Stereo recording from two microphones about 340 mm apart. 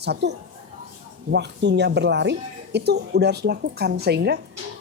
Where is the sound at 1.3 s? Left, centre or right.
Right.